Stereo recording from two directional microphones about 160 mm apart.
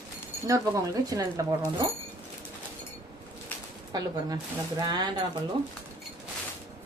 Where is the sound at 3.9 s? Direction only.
25° right (ahead or behind).